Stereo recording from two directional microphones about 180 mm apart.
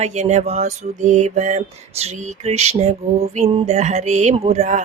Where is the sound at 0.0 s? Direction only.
40° right (ahead or behind).